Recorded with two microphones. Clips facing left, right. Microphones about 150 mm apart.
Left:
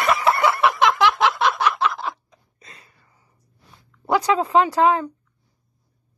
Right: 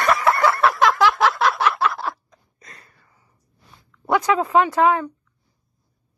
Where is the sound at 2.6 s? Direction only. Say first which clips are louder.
Right 1 dB; 25° left (ahead or behind).